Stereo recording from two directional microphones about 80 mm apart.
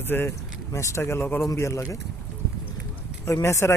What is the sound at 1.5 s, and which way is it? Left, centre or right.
Speech, left.